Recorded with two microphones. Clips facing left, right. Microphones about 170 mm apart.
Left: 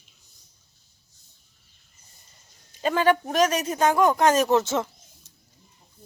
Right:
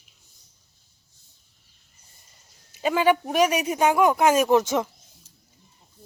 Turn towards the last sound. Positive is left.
turn(degrees=-15)  # may be behind; listen again after turning